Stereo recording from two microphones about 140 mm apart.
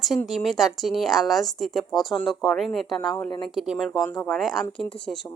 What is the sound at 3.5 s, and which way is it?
Speech, 5° right (ahead or behind).